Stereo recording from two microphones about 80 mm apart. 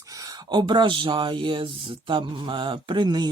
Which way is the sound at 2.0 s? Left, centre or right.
Right.